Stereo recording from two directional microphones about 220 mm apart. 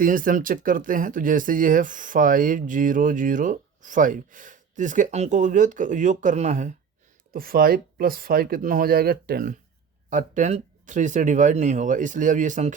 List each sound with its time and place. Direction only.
0.0 s speech: 40° right (ahead or behind)